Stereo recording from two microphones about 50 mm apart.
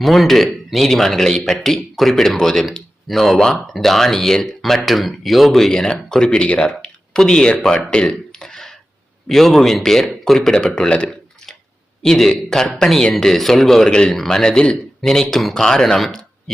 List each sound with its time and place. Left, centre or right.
0.0 s speech: centre
7.8 s a sound: centre
9.3 s speech: centre; by 11.2 s left
12.0 s speech: centre